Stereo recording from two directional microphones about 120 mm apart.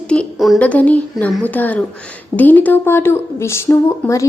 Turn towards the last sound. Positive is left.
turn(degrees=25)  # may be behind; listen again after turning